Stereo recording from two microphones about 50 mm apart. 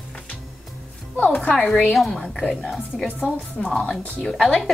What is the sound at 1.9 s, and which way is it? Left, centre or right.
Speech, centre.